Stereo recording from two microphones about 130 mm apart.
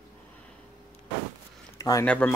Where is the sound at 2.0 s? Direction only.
10° left (ahead or behind).